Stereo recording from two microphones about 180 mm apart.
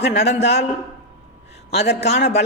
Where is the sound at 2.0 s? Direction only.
35° left (ahead or behind).